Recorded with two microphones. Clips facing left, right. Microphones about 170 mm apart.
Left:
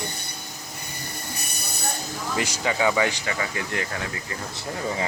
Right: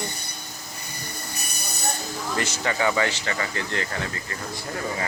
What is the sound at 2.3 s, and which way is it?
Speech, 10° left (ahead or behind).